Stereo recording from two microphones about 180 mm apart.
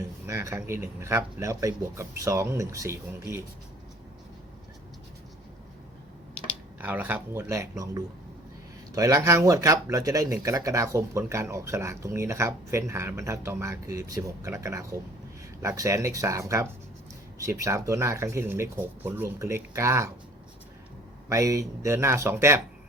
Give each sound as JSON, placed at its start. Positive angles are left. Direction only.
{"t": 0.3, "sound": "speech", "side_deg": -15}
{"t": 6.7, "sound": "speech", "side_deg": -10}
{"t": 21.2, "sound": "speech", "side_deg": -20}